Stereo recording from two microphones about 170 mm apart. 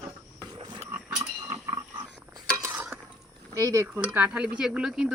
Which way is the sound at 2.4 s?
15° right (ahead or behind).